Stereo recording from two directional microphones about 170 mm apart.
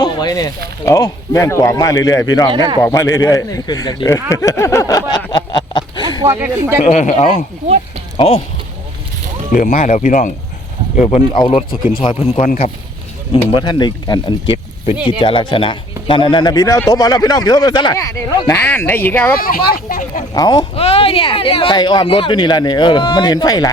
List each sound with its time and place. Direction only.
0.0 s speech: 25° left (ahead or behind)
2.5 s speech: 25° right (ahead or behind)
2.8 s speech: 20° left (ahead or behind)
6.1 s speech: 15° right (ahead or behind)
6.8 s speech: 45° left (ahead or behind)
9.5 s speech: 55° left (ahead or behind)
9.7 s speech: 45° left (ahead or behind)
11.3 s speech: 25° left (ahead or behind); by 12.7 s 45° left (ahead or behind)
13.3 s speech: 30° left (ahead or behind); by 19.4 s 10° left (ahead or behind)
19.4 s speech: 60° left (ahead or behind)
20.3 s speech: 25° left (ahead or behind)
20.7 s speech: 35° left (ahead or behind)